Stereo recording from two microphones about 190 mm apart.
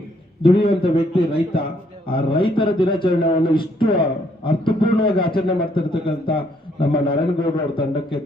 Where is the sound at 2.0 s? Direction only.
25° left (ahead or behind).